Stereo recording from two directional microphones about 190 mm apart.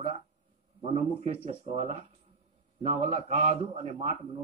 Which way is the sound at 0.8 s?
35° right (ahead or behind).